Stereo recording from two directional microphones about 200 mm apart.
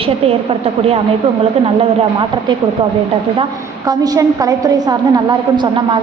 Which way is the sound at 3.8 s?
20° right (ahead or behind).